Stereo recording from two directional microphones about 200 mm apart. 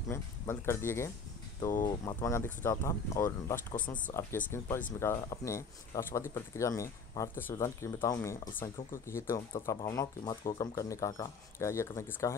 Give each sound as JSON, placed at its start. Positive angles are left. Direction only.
{"t": 0.1, "sound": "speech", "side_deg": 15}
{"t": 3.7, "sound": "speech", "side_deg": 40}
{"t": 4.1, "sound": "speech", "side_deg": 15}